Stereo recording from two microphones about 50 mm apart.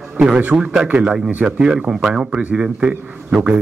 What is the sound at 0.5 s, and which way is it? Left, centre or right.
Speech, centre.